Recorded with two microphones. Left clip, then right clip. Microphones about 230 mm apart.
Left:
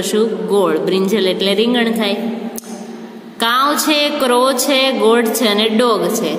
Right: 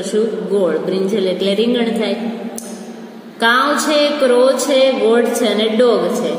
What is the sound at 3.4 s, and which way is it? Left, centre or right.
A woman's voice, left.